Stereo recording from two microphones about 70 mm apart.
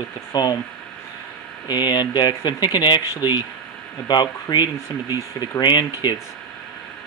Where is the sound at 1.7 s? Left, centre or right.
Left.